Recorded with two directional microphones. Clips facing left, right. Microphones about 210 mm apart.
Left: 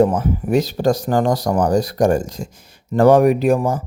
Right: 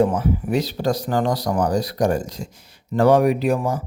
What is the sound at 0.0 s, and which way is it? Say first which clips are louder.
A man's voice: left 3 dB; 45° left (ahead or behind).